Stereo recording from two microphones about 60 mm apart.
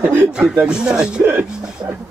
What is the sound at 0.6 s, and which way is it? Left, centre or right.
Speech, centre.